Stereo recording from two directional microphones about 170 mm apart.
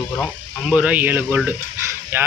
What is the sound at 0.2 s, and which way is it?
Speech, 5° right (ahead or behind).